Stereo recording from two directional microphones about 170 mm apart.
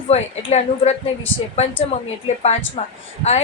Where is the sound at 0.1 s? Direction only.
40° left (ahead or behind).